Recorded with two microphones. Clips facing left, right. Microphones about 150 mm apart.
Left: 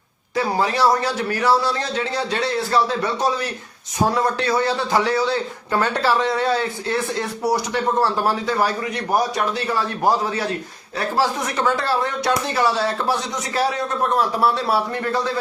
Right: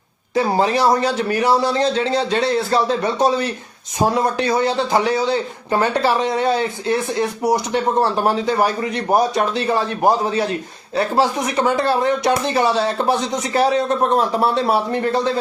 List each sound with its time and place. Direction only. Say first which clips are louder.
0.3 s a man's voice: right 3 dB; 25° right (ahead or behind)